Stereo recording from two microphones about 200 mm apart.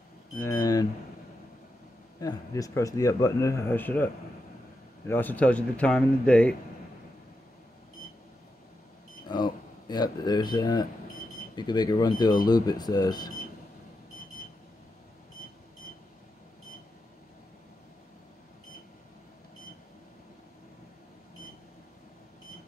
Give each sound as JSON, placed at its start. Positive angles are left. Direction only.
{"t": 0.4, "sound": "speech", "side_deg": 15}
{"t": 2.1, "sound": "speech", "side_deg": 15}
{"t": 9.3, "sound": "speech", "side_deg": 20}